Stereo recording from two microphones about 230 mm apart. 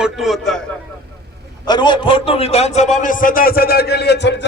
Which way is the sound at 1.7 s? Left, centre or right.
Centre.